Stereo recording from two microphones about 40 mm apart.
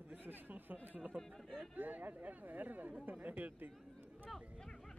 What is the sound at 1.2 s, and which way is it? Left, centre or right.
Speech, centre.